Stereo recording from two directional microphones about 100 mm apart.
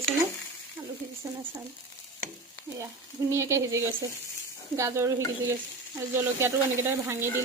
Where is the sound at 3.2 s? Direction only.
30° right (ahead or behind).